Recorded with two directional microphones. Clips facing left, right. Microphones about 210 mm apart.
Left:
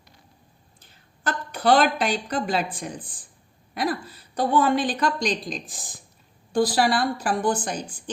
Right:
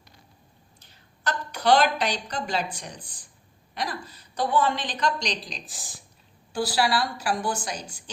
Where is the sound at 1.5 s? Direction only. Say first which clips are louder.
Left 2 dB; 50° left (ahead or behind).